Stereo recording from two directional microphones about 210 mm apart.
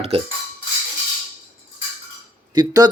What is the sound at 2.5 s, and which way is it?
Speech, 20° right (ahead or behind).